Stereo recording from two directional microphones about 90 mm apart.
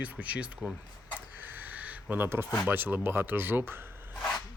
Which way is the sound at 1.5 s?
20° right (ahead or behind).